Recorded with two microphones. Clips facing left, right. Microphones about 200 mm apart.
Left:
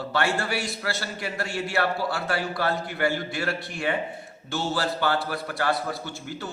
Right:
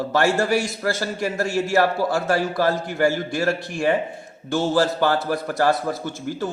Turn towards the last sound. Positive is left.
turn(degrees=-45)  # may be behind; listen again after turning